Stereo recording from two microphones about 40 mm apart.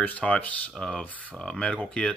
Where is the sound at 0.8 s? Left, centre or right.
Left.